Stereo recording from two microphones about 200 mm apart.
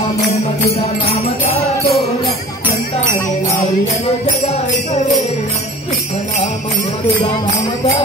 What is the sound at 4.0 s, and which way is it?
Music, 30° left (ahead or behind).